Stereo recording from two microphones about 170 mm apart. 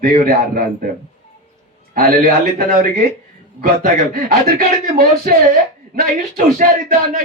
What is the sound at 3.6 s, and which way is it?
A man's voice, 60° right (ahead or behind).